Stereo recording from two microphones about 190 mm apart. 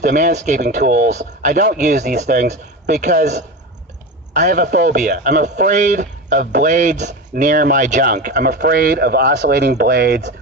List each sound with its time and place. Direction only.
0.0 s speech: 45° right (ahead or behind)
4.4 s speech: 50° right (ahead or behind)
5.7 s speech: 40° right (ahead or behind)